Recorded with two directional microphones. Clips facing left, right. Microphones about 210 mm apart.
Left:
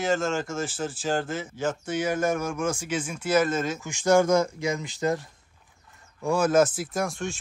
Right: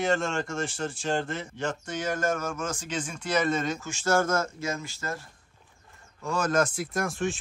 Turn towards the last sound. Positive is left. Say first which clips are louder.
# even
turn(degrees=0)  # may be behind; listen again after turning